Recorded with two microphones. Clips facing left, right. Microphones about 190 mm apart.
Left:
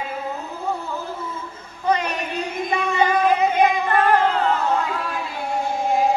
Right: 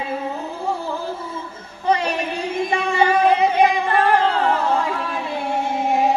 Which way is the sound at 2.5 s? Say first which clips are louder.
Right 3 dB; 30° right (ahead or behind).